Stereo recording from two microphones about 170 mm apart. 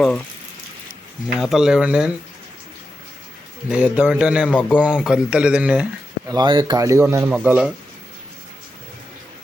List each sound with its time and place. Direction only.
1.4 s speech: centre (ahead or behind)
3.7 s a man's voice: 5° right (ahead or behind)
6.2 s a man's voice: 25° right (ahead or behind)
7.3 s speech: 5° right (ahead or behind)